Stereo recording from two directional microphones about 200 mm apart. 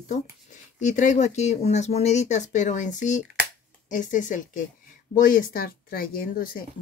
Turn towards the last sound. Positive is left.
turn(degrees=45)  # may be behind; listen again after turning